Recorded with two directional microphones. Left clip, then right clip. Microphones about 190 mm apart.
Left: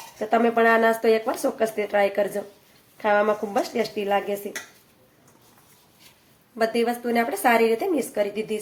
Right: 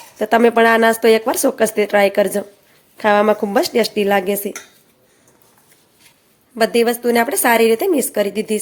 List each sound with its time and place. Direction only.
0.2 s speech: 60° right (ahead or behind)
6.6 s speech: 55° right (ahead or behind)